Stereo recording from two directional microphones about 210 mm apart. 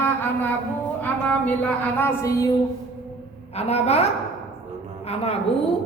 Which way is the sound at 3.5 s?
30° left (ahead or behind).